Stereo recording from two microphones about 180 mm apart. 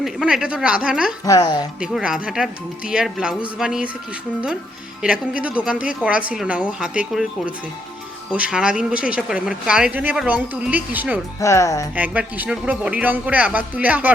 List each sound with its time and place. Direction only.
0.0 s speech: centre (ahead or behind)
1.2 s a woman's voice: 20° left (ahead or behind)
1.8 s speech: 5° right (ahead or behind)
5.0 s speech: 5° right (ahead or behind)
11.3 s speech: 15° left (ahead or behind)
11.9 s speech: 10° right (ahead or behind)